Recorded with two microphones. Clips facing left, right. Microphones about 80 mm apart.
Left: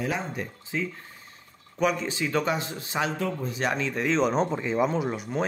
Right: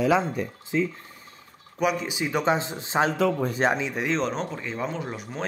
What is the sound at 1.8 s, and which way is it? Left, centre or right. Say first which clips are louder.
Speech: even; centre.